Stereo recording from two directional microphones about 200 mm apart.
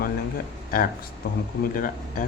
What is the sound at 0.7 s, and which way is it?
Speech, 45° left (ahead or behind).